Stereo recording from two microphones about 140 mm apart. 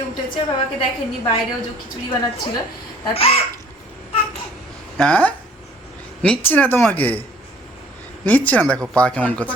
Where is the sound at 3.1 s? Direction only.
45° left (ahead or behind).